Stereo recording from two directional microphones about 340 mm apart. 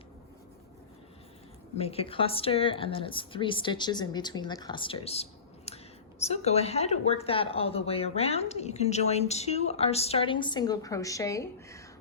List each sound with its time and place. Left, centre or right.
1.8 s a woman's voice: centre